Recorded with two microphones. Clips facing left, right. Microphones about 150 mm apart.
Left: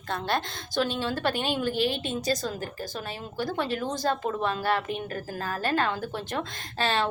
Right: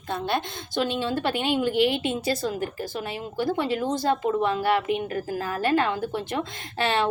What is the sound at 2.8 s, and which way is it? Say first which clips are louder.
Speech: right 4 dB; 25° right (ahead or behind).